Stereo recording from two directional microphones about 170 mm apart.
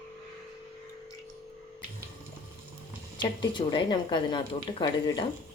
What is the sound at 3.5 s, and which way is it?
Speech, 25° left (ahead or behind).